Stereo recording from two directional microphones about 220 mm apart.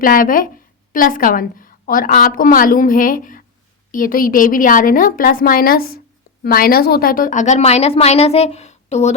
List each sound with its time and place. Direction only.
0.0 s a woman's voice: 40° left (ahead or behind)